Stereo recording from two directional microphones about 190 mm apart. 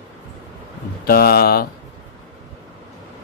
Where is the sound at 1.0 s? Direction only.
50° left (ahead or behind).